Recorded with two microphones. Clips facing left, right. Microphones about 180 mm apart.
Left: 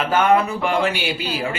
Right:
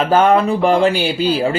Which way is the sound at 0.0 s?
35° right (ahead or behind).